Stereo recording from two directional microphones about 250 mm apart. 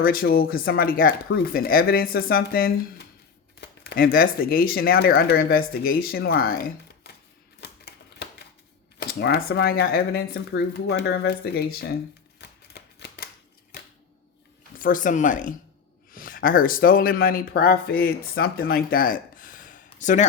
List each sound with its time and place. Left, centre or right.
0.0 s speech: left
7.6 s typewriter: left
9.0 s speech: left
12.4 s typewriter: left
14.8 s a man's voice: left